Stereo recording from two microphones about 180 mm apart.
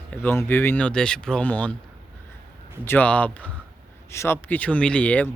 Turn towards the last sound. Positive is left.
turn(degrees=10)  # may be behind; listen again after turning